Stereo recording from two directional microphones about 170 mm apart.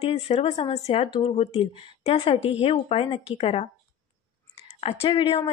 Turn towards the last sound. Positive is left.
turn(degrees=35)  # may be behind; listen again after turning